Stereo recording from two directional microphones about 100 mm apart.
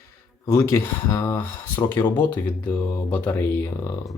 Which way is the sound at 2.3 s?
10° left (ahead or behind).